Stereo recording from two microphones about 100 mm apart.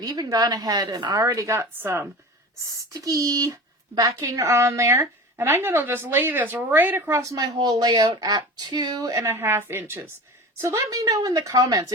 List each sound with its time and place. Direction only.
0.0 s a woman's voice: 40° right (ahead or behind); by 2.0 s 25° right (ahead or behind)
2.6 s a woman's voice: 35° right (ahead or behind); by 7.2 s 20° right (ahead or behind)
7.2 s a woman's voice: 35° right (ahead or behind)
10.6 s a woman's voice: 40° right (ahead or behind)